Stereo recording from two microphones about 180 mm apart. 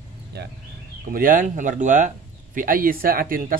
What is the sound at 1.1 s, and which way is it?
Speech, 50° right (ahead or behind).